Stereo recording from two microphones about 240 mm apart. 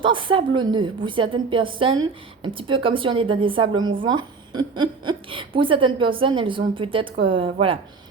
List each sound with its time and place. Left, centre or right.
0.0 s a woman's voice: right